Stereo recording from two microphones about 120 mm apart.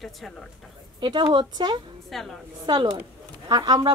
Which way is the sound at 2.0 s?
Centre (ahead or behind).